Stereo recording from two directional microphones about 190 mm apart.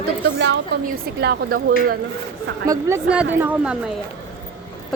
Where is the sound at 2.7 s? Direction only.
15° right (ahead or behind).